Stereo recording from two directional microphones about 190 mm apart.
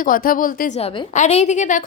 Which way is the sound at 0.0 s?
45° left (ahead or behind).